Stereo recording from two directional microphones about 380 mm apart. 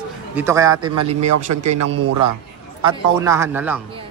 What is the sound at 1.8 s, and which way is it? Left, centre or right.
Speech, right.